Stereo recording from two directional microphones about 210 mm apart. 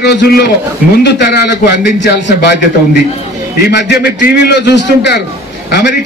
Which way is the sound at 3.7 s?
50° left (ahead or behind).